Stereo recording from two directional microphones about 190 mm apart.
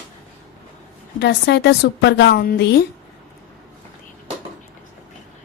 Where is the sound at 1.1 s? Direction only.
65° left (ahead or behind).